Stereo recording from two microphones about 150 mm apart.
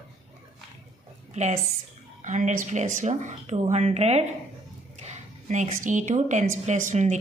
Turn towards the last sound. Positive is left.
turn(degrees=-55)  # may be behind; listen again after turning